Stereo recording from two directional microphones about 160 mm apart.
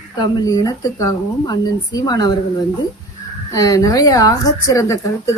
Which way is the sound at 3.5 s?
25° left (ahead or behind).